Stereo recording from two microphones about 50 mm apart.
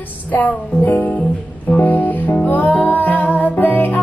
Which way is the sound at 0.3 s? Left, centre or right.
Left.